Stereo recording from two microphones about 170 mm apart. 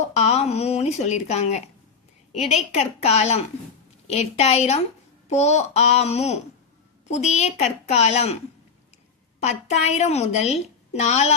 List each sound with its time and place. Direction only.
0.0 s a woman's voice: 40° left (ahead or behind)
2.7 s a woman's voice: 40° left (ahead or behind)
9.4 s a woman's voice: 40° left (ahead or behind)